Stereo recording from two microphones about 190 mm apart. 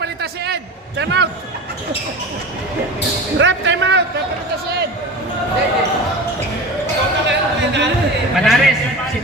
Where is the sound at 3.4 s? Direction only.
75° right (ahead or behind).